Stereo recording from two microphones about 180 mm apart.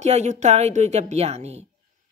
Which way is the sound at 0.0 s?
40° right (ahead or behind).